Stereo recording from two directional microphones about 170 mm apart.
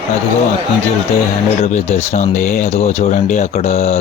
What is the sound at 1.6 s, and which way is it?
Speech, 40° left (ahead or behind).